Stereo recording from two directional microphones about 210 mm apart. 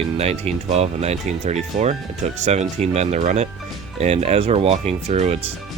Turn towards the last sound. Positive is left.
turn(degrees=-30)  # may be behind; listen again after turning